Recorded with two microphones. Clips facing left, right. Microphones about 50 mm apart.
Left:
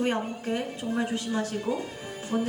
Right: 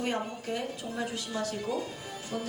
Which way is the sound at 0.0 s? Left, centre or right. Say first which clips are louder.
Left 4 dB; left.